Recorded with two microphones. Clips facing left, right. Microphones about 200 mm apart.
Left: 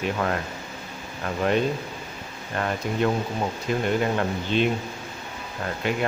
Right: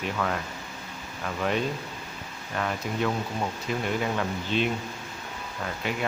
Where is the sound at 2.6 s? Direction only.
40° left (ahead or behind).